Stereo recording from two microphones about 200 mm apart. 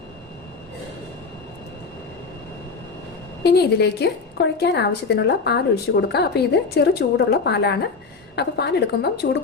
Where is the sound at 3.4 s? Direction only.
55° left (ahead or behind).